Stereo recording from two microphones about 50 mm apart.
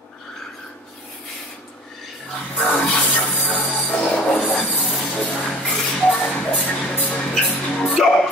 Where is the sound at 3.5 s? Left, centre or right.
Left.